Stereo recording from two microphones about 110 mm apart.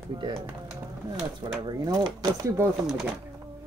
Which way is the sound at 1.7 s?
40° right (ahead or behind).